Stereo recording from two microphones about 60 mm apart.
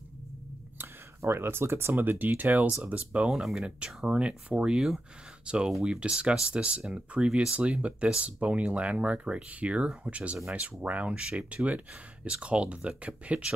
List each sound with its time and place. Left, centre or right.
1.2 s speech: right; by 4.7 s centre
4.7 s speech: centre